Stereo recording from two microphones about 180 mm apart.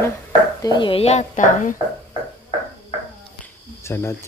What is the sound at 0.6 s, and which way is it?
A woman's voice, 25° left (ahead or behind).